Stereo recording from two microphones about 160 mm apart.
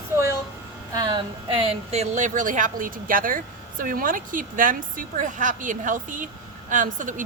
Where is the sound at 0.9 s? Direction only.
25° right (ahead or behind).